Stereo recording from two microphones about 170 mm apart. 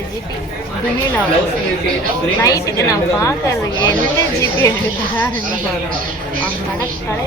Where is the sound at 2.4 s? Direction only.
20° left (ahead or behind).